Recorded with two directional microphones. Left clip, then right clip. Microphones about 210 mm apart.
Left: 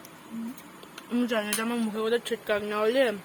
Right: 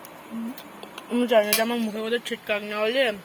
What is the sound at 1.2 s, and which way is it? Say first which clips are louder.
Speech: right 10 dB; 20° left (ahead or behind).